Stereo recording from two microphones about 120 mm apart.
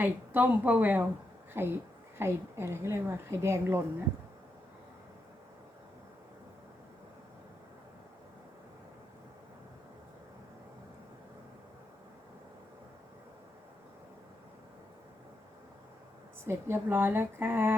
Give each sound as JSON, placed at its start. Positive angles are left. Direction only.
{"t": 0.0, "sound": "a woman's voice", "side_deg": -15}
{"t": 16.5, "sound": "a woman's voice", "side_deg": -20}